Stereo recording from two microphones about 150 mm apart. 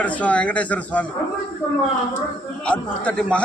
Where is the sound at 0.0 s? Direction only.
10° left (ahead or behind).